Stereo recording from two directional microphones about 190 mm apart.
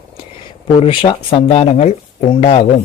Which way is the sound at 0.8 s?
25° left (ahead or behind).